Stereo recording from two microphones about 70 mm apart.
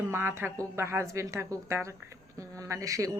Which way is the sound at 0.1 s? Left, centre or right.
Right.